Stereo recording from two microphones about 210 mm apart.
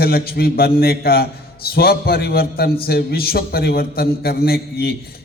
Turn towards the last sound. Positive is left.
turn(degrees=50)  # may be behind; listen again after turning